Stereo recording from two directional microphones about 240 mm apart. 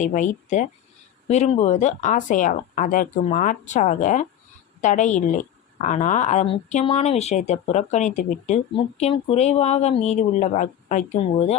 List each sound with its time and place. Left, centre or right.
0.0 s speech: left